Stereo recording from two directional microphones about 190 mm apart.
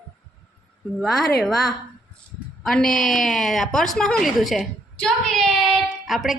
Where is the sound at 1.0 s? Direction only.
Centre (ahead or behind).